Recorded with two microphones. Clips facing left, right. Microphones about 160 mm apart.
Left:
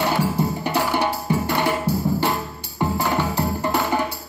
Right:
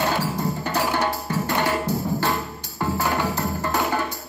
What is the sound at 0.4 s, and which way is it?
Music, 15° left (ahead or behind).